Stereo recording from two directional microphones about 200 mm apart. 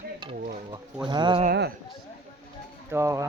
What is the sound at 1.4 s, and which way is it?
Speech, 55° right (ahead or behind).